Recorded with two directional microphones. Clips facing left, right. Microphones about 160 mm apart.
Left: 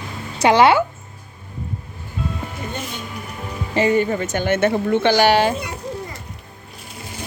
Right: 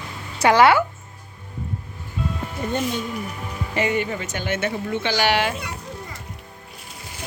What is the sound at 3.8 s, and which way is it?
A woman's voice, 35° left (ahead or behind).